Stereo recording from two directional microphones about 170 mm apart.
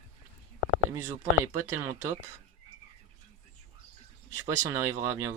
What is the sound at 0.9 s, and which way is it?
Speech, 15° right (ahead or behind).